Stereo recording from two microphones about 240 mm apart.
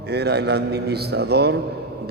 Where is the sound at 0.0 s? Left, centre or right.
Right.